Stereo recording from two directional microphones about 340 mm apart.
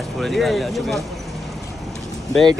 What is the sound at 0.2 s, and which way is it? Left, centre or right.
Speech, centre.